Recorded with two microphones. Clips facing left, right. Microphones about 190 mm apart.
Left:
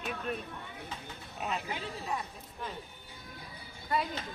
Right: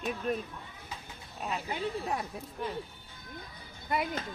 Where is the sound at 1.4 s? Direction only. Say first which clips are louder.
Even; 5° left (ahead or behind).